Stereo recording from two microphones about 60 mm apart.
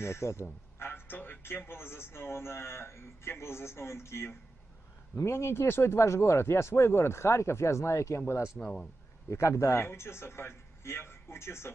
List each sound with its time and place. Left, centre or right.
0.0 s a man's voice: left
8.5 s speech: centre
9.3 s speech: left